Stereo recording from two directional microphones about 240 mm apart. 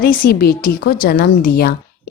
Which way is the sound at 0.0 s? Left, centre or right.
Left.